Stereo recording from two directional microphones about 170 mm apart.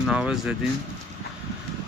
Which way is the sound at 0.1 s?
5° right (ahead or behind).